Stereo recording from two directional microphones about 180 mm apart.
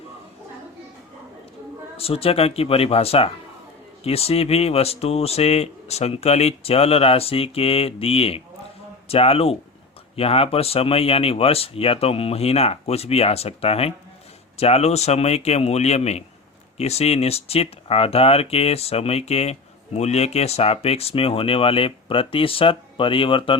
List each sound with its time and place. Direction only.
2.0 s speech: 35° left (ahead or behind)